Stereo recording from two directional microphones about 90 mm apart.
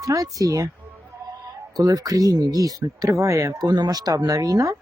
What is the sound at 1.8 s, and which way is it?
Speech, 45° right (ahead or behind).